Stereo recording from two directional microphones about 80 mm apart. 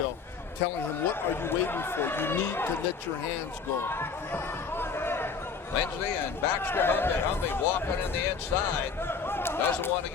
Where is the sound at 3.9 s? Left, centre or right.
Left.